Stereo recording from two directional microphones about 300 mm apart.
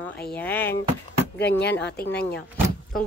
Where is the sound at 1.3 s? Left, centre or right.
Left.